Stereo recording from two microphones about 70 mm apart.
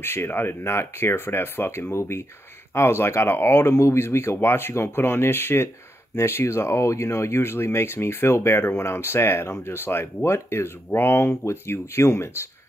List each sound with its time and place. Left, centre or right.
0.0 s speech: left